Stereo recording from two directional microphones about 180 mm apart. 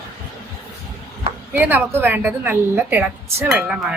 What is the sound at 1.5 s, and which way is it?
A woman's voice, 10° right (ahead or behind).